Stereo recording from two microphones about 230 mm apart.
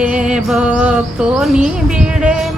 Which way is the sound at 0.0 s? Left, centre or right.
Centre.